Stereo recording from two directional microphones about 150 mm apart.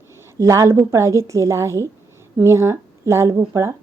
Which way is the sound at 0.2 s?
20° right (ahead or behind).